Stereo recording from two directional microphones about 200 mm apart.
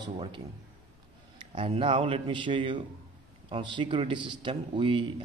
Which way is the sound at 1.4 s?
25° right (ahead or behind).